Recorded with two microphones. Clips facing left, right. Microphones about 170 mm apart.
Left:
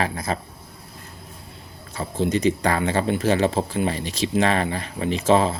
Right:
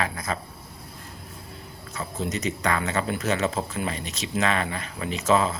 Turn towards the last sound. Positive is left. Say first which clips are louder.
# left 4 dB
turn(degrees=30)  # may be behind; listen again after turning